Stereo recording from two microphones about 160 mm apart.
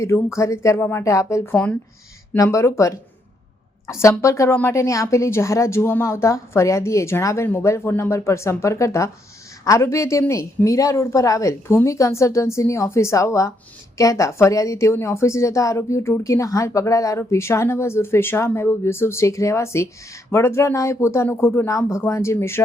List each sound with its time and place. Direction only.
0.0 s a woman's voice: 20° left (ahead or behind)
4.2 s a woman's voice: 20° left (ahead or behind)